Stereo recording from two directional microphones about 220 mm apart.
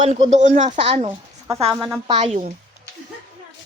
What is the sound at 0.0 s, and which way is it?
A woman's voice, 30° right (ahead or behind).